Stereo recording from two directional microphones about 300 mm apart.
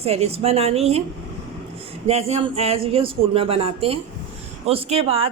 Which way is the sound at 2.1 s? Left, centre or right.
Centre.